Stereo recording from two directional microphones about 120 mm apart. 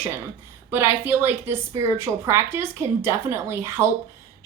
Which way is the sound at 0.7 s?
20° right (ahead or behind).